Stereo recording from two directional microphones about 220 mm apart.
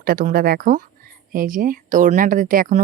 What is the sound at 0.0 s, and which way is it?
Speech, 40° right (ahead or behind).